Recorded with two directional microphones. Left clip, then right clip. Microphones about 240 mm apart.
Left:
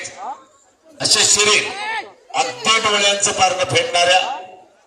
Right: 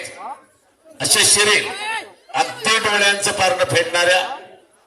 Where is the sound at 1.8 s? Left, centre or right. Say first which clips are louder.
Left 1 dB; right.